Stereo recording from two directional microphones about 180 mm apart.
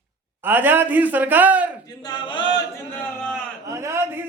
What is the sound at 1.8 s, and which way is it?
Chant, 20° left (ahead or behind).